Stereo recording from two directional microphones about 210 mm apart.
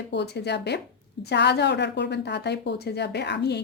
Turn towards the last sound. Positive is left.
turn(degrees=55)  # may be behind; listen again after turning